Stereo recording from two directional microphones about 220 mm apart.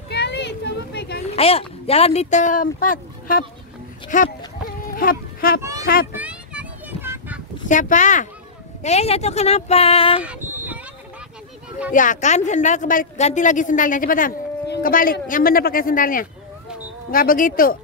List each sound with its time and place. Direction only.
0.1 s a sound: 50° left (ahead or behind)
1.3 s speech: 25° left (ahead or behind)
4.1 s a woman's voice: 35° left (ahead or behind)
5.6 s a child's voice: 15° right (ahead or behind)
6.1 s a sound: 5° right (ahead or behind)
7.6 s a woman's voice: 35° left (ahead or behind)
11.9 s a woman's voice: 35° left (ahead or behind)